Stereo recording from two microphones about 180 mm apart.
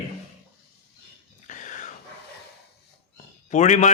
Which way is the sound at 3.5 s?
40° left (ahead or behind).